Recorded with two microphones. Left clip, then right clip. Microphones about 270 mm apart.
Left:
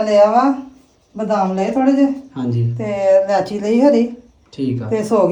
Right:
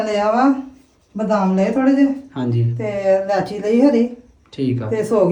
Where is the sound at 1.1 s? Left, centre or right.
Centre.